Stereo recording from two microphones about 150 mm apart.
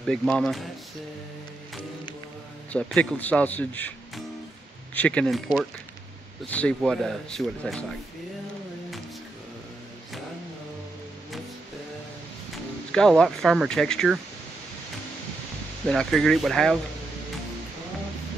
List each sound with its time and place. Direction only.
0.0 s speech: 5° left (ahead or behind)
2.7 s a man's voice: 5° left (ahead or behind)
4.9 s speech: 10° left (ahead or behind)
6.8 s speech: centre (ahead or behind)
12.9 s speech: 5° left (ahead or behind)
15.9 s speech: centre (ahead or behind)